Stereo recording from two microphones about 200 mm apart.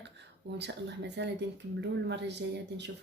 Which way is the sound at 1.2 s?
60° right (ahead or behind).